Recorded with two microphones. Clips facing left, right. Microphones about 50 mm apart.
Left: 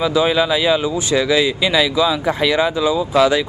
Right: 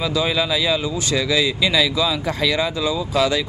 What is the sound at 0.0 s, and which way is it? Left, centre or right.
Speech, left.